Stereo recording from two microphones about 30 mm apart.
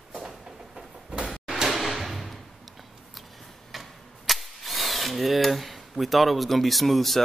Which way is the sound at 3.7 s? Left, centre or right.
Centre.